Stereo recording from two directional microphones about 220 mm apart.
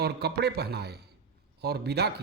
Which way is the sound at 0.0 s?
45° right (ahead or behind).